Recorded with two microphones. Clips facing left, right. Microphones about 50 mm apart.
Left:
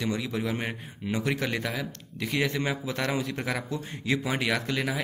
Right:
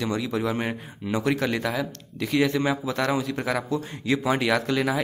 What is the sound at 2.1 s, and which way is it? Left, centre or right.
A man's voice, centre.